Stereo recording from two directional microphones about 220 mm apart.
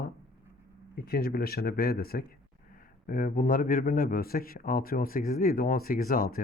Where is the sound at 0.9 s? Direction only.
45° left (ahead or behind).